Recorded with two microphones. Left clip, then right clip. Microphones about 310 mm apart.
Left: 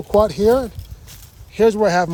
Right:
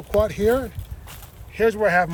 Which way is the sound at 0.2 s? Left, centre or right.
Left.